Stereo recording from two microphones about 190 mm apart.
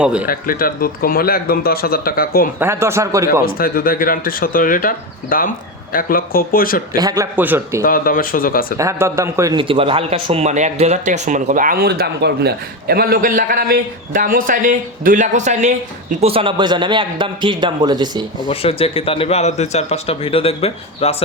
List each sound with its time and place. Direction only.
0.0 s speech: 5° right (ahead or behind)
0.3 s speech: 50° left (ahead or behind)
2.6 s a man's voice: 15° right (ahead or behind)
3.4 s speech: 50° left (ahead or behind)
6.9 s a man's voice: 20° right (ahead or behind)
7.9 s speech: 50° left (ahead or behind)
8.8 s a man's voice: 15° right (ahead or behind)
18.4 s speech: 30° left (ahead or behind)